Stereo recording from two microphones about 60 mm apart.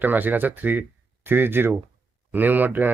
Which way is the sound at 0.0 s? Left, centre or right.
Right.